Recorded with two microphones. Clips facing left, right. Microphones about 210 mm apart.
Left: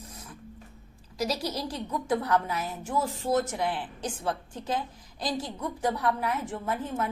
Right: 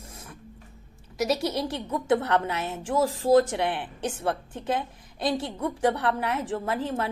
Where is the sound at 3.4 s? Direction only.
80° right.